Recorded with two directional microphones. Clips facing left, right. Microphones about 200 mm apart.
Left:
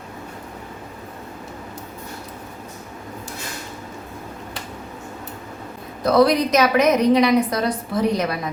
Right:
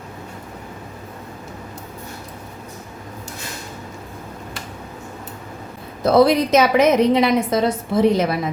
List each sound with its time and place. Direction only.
6.0 s a woman's voice: 25° right (ahead or behind)